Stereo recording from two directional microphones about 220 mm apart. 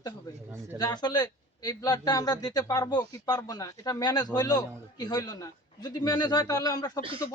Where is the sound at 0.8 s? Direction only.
20° left (ahead or behind).